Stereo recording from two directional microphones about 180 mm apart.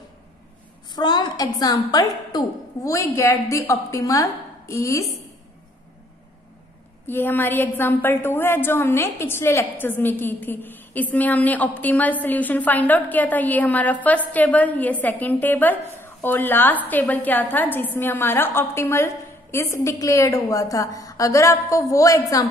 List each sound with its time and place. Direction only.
0.9 s a woman's voice: 25° left (ahead or behind)
7.1 s a woman's voice: 10° left (ahead or behind)